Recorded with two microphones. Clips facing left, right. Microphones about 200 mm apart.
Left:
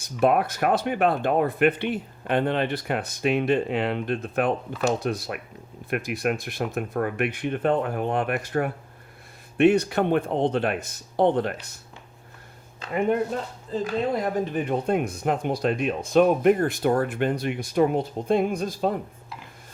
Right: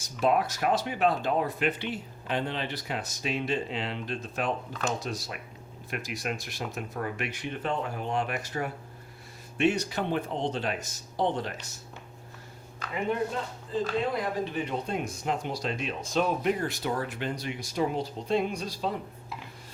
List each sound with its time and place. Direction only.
0.0 s speech: 55° left (ahead or behind)
12.9 s speech: 50° left (ahead or behind)